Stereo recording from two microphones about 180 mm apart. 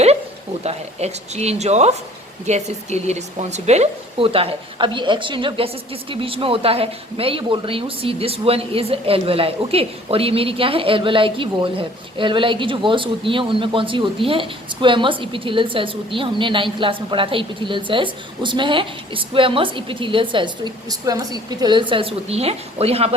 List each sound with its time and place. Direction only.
0.6 s a woman's voice: 35° right (ahead or behind)